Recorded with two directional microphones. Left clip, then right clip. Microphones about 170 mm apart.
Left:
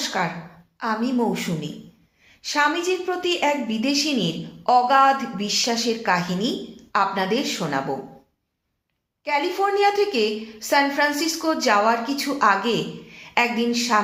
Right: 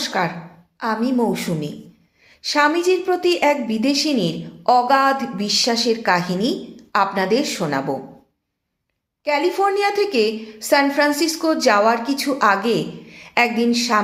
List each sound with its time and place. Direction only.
0.0 s a sound: 40° right (ahead or behind)
0.8 s a woman's voice: 40° right (ahead or behind)
9.2 s a woman's voice: 40° right (ahead or behind)